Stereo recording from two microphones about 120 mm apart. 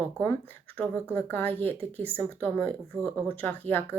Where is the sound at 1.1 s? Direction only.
15° left (ahead or behind).